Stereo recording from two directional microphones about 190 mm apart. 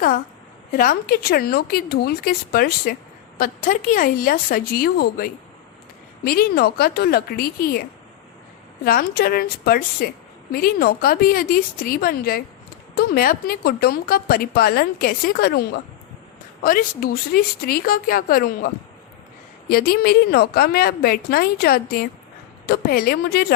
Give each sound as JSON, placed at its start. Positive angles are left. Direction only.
{"t": 0.7, "sound": "a woman's voice", "side_deg": 50}